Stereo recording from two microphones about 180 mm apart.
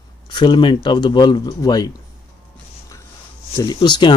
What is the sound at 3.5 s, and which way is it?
Speech, 20° left (ahead or behind).